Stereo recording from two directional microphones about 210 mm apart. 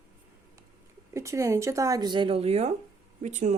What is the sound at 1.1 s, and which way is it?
Speech, 15° right (ahead or behind).